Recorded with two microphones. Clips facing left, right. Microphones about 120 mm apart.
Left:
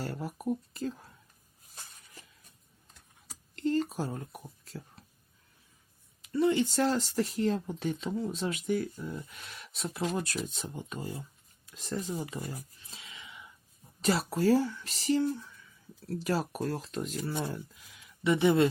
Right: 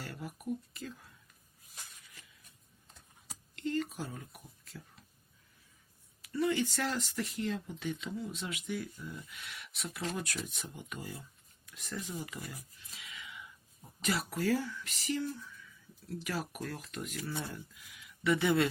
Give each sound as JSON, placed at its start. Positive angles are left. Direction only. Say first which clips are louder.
{"t": 0.0, "sound": "speech", "louder": "left 7 dB", "side_deg": 35}
{"t": 3.5, "sound": "a sound", "louder": "left 6 dB", "side_deg": 35}
{"t": 6.2, "sound": "speech", "louder": "left 5 dB", "side_deg": 25}